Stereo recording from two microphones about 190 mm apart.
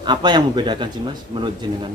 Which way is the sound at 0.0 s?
25° right (ahead or behind).